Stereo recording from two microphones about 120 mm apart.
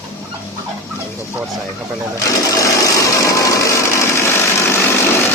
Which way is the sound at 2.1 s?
25° left (ahead or behind).